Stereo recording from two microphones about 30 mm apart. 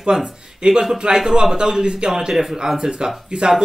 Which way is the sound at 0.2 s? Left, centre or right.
Right.